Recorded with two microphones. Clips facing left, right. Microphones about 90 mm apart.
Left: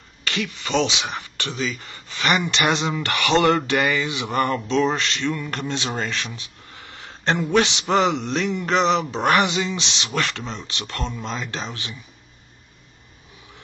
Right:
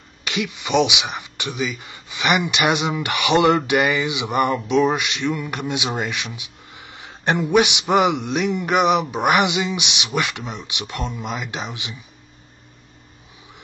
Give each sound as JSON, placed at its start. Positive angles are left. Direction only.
{"t": 0.2, "sound": "speech", "side_deg": -15}